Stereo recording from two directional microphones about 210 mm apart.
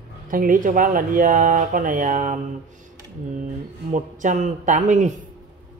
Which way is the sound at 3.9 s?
35° right (ahead or behind).